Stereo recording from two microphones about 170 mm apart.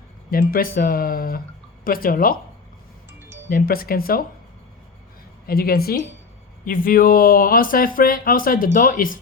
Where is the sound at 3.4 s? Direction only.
60° left (ahead or behind).